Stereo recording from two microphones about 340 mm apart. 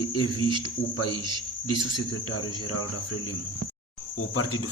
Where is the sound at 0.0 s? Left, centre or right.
Left.